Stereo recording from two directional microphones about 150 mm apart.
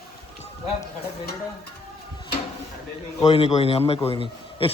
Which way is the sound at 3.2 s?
40° left (ahead or behind).